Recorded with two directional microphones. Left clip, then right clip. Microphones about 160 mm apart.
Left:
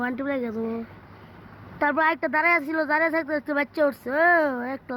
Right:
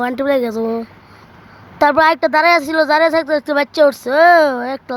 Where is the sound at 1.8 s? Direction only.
55° right (ahead or behind).